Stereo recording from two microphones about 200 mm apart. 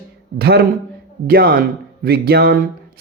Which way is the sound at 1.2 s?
45° right (ahead or behind).